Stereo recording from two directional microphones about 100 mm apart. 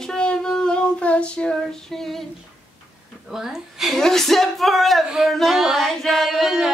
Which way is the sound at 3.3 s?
5° right (ahead or behind).